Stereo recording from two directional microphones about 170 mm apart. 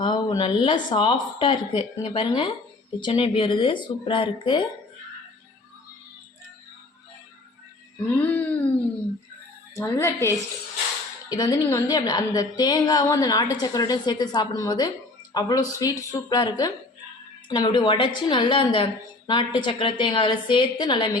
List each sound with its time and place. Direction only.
0.0 s a woman's voice: 25° left (ahead or behind)
8.2 s a sound: 10° left (ahead or behind)
9.7 s a woman's voice: 15° left (ahead or behind)